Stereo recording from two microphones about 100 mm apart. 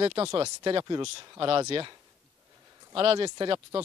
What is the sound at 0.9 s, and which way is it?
Speech, 45° right (ahead or behind).